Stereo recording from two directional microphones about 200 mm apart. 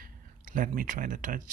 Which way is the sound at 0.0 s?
45° right (ahead or behind).